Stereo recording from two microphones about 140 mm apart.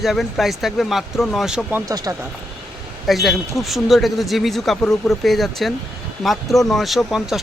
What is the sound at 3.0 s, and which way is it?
Speech, centre (ahead or behind).